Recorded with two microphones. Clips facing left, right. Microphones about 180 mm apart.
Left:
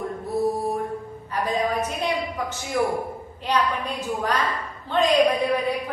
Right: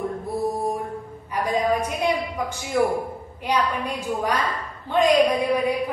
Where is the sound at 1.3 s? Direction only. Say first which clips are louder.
Right 2 dB; 10° right (ahead or behind).